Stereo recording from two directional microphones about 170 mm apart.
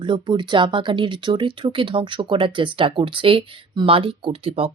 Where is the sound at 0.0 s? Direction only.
25° right (ahead or behind).